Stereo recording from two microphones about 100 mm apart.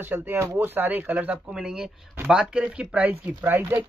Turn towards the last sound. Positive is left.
turn(degrees=-25)  # may be behind; listen again after turning